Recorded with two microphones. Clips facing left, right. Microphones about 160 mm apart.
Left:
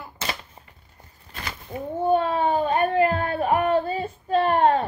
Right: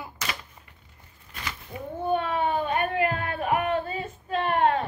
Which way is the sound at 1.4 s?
35° left (ahead or behind).